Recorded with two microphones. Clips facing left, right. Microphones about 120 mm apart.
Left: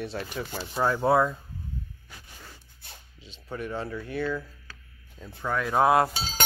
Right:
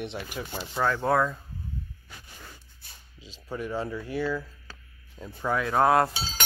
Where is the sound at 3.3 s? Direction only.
10° right (ahead or behind).